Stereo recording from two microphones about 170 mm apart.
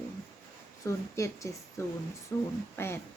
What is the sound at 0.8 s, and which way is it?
A woman's voice, 20° left (ahead or behind).